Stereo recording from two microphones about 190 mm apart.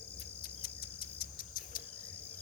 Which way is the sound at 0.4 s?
50° left (ahead or behind).